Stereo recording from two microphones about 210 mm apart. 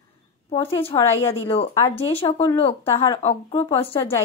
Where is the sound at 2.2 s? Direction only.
25° left (ahead or behind).